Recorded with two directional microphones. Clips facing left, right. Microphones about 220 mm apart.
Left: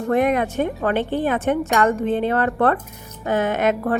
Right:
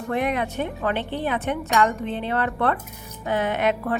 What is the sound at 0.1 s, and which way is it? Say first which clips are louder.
Speech: left 6 dB; 45° left (ahead or behind).